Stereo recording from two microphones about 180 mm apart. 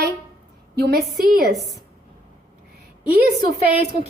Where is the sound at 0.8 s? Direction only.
60° right (ahead or behind).